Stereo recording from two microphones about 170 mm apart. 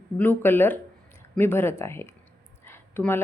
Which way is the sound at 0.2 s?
10° left (ahead or behind).